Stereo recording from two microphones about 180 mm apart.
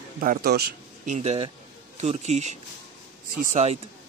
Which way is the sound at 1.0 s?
40° right (ahead or behind).